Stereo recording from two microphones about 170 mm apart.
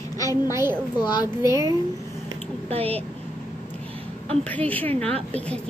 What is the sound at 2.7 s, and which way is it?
Speech, 35° right (ahead or behind).